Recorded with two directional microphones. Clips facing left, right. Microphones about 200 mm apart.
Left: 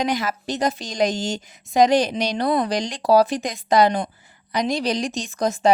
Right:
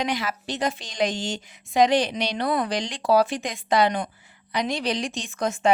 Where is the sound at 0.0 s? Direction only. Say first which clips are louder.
Left 4 dB; 40° left (ahead or behind).